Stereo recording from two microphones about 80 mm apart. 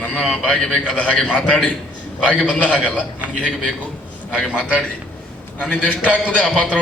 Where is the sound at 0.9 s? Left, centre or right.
Centre.